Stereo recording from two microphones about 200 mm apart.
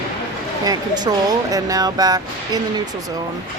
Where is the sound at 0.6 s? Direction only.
20° right (ahead or behind).